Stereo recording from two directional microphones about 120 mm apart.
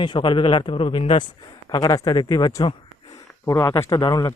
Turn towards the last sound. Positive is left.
turn(degrees=35)  # may be behind; listen again after turning